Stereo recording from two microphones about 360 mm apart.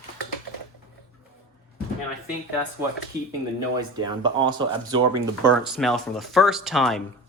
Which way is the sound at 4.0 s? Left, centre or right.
Centre.